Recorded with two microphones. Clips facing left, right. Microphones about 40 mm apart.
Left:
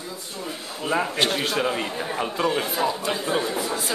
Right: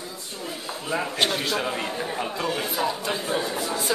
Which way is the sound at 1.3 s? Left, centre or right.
Centre.